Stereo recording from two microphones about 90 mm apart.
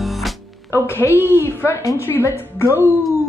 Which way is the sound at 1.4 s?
30° left (ahead or behind).